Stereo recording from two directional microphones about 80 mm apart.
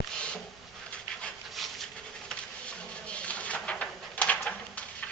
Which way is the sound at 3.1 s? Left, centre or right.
Centre.